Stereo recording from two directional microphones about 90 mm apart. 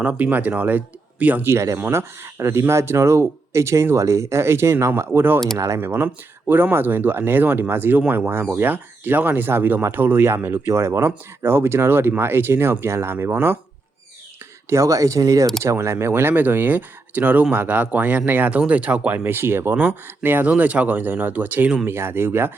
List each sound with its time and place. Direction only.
0.0 s speech: 15° right (ahead or behind)
5.5 s speech: 35° right (ahead or behind)
14.7 s speech: 35° right (ahead or behind)